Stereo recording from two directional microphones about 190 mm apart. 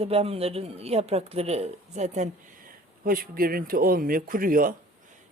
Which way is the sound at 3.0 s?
50° right (ahead or behind).